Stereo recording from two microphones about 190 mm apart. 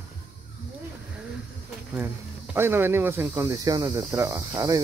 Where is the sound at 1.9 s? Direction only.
10° right (ahead or behind).